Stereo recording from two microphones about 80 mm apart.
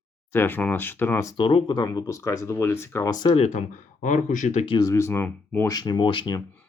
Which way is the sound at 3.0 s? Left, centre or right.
Left.